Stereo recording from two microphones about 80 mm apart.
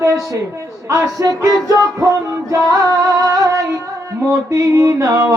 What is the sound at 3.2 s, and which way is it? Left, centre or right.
Music, right.